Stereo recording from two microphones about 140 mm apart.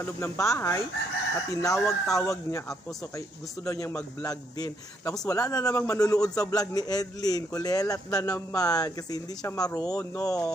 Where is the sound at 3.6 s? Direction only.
20° left (ahead or behind).